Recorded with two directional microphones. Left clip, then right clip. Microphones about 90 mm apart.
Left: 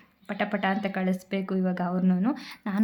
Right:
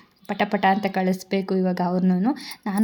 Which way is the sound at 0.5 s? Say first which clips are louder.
Right 9 dB; 45° right (ahead or behind).